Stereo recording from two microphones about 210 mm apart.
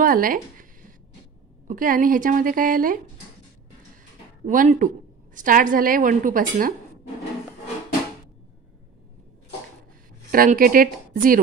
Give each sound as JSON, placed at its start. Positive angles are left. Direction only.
{"t": 0.0, "sound": "a sound", "side_deg": -40}
{"t": 1.7, "sound": "a woman's voice", "side_deg": -40}
{"t": 4.5, "sound": "a woman's voice", "side_deg": -40}
{"t": 10.3, "sound": "a woman's voice", "side_deg": -40}